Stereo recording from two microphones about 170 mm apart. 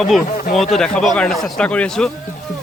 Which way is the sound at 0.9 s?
5° left (ahead or behind).